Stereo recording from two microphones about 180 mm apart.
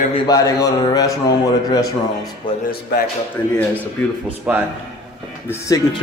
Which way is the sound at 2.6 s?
55° left (ahead or behind).